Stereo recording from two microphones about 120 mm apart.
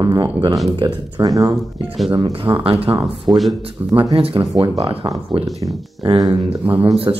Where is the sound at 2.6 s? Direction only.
50° right (ahead or behind).